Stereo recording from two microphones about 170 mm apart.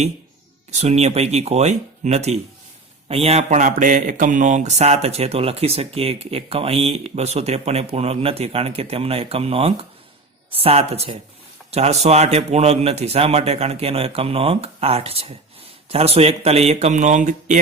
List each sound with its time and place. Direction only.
0.7 s speech: 40° right (ahead or behind)